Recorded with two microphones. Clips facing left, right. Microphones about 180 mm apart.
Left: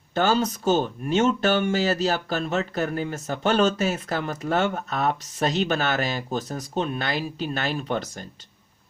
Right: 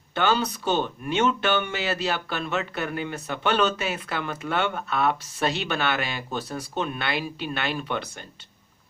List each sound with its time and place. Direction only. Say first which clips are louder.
0.1 s speech: left 2 dB; 40° left (ahead or behind)